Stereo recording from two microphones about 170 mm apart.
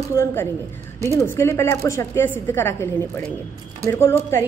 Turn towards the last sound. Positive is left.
turn(degrees=15)  # may be behind; listen again after turning